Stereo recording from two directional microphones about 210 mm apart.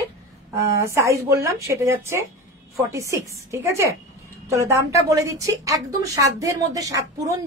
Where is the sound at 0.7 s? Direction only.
15° right (ahead or behind).